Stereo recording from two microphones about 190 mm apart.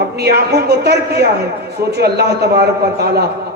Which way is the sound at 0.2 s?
60° right (ahead or behind).